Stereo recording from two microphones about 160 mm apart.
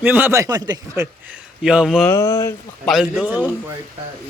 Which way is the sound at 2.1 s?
15° left (ahead or behind).